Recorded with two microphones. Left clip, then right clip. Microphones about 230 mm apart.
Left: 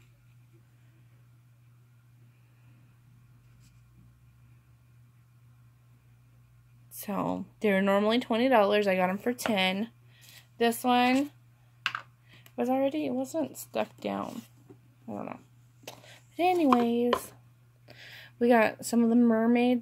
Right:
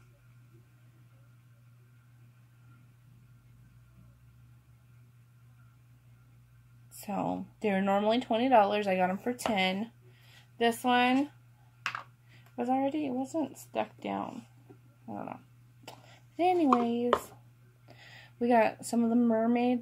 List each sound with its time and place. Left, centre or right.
7.0 s speech: left
12.5 s speech: left
15.8 s a sound: left
17.8 s a woman's voice: left